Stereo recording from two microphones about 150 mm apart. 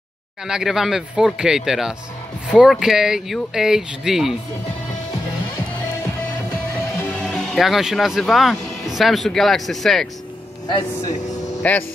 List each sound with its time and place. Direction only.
0.5 s speech: 5° right (ahead or behind)
7.0 s speech: 10° left (ahead or behind)
10.7 s speech: 35° left (ahead or behind)
11.6 s speech: 10° left (ahead or behind)